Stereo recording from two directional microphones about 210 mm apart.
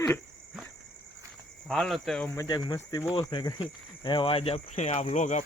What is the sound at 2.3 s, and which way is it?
Speech, 20° left (ahead or behind).